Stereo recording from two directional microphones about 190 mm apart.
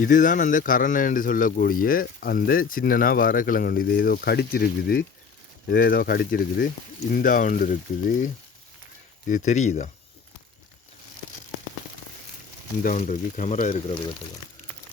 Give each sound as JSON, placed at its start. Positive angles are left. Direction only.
{"t": 0.0, "sound": "a man's voice", "side_deg": 45}
{"t": 12.8, "sound": "speech", "side_deg": 40}